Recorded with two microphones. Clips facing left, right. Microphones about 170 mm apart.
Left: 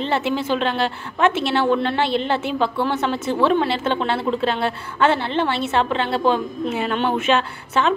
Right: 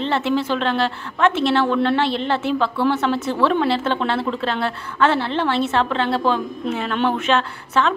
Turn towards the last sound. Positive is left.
turn(degrees=5)  # may be behind; listen again after turning